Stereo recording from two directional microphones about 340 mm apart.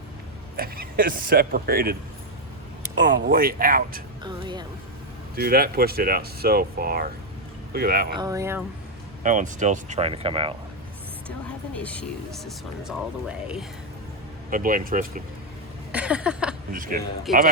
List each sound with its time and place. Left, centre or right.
0.5 s speech: right
3.0 s speech: right
4.2 s speech: centre
5.4 s speech: right
8.1 s speech: centre
9.2 s speech: right
11.4 s speech: centre
14.5 s speech: right
15.9 s a sound: centre
16.7 s speech: right
17.3 s speech: centre